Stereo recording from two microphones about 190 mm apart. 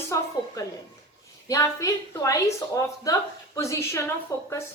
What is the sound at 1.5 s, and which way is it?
A woman's voice, 15° left (ahead or behind).